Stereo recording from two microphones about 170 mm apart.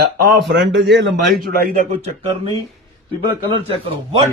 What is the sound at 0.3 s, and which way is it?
Speech, 85° right.